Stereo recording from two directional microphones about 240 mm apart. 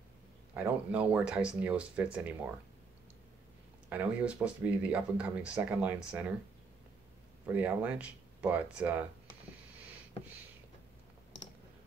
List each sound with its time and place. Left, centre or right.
0.6 s speech: centre
3.9 s speech: centre
7.5 s speech: centre